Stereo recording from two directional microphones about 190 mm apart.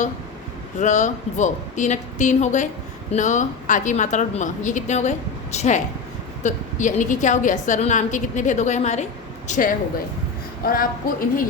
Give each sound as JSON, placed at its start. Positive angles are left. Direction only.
{"t": 0.8, "sound": "a woman's voice", "side_deg": 40}